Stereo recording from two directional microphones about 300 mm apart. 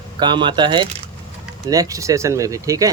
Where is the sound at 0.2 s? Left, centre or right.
Centre.